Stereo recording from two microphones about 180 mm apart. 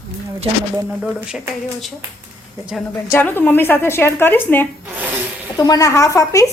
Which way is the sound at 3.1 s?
10° left (ahead or behind).